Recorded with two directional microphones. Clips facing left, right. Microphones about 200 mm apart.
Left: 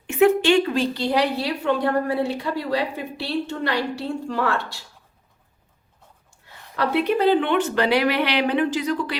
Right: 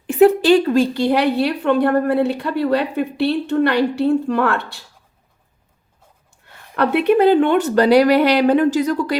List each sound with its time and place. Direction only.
0.1 s a woman's voice: 35° right (ahead or behind); by 4.8 s 60° right (ahead or behind)
6.7 s speech: 55° right (ahead or behind)